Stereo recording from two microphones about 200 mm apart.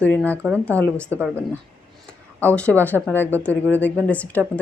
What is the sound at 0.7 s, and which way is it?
Speech, 5° left (ahead or behind).